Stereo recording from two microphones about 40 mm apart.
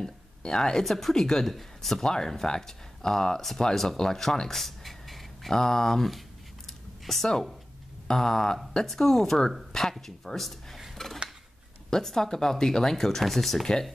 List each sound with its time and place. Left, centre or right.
0.0 s speech: centre
0.8 s speech: centre
3.9 s a sound: centre
5.5 s speech: centre
11.0 s dishes: centre
11.9 s speech: centre